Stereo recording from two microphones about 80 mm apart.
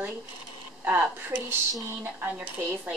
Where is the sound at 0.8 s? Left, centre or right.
Right.